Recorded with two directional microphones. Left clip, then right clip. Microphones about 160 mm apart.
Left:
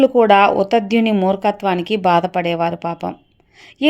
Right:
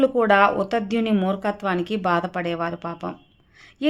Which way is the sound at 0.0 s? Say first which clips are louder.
Left 6 dB; 35° left (ahead or behind).